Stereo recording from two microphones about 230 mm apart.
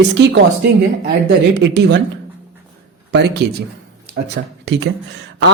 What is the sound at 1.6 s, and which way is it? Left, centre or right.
Speech, right.